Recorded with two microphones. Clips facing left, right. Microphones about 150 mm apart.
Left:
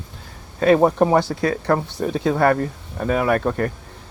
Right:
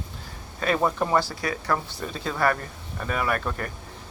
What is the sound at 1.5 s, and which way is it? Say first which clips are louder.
Speech: left 5 dB; 45° left (ahead or behind).